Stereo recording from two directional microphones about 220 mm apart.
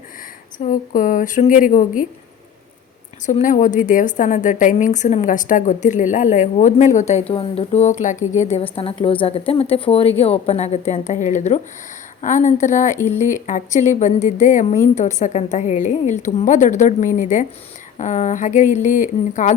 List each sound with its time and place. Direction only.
0.6 s a woman's voice: 35° left (ahead or behind)
3.2 s a woman's voice: 35° left (ahead or behind)